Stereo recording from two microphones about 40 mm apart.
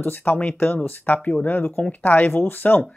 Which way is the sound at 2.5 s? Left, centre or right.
Left.